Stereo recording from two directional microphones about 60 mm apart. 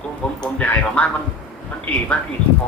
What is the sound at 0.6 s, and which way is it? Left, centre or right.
Goose, left.